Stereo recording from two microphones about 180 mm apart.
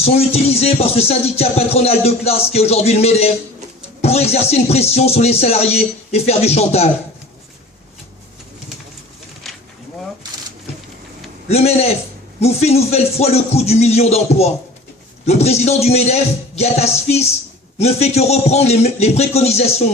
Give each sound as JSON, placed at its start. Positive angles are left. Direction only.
{"t": 0.0, "sound": "music", "side_deg": 35}
{"t": 11.4, "sound": "a man's voice", "side_deg": 35}
{"t": 12.4, "sound": "music", "side_deg": 35}